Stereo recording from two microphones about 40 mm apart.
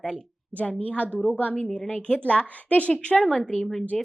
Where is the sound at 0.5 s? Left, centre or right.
Left.